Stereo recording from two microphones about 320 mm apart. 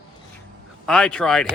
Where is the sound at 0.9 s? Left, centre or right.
Centre.